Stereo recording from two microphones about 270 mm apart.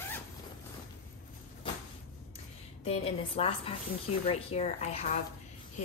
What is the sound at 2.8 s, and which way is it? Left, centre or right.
A woman's voice, left.